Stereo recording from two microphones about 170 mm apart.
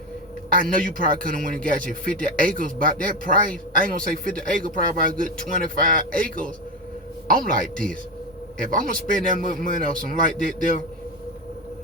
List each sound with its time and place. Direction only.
0.5 s a man's voice: 55° right (ahead or behind)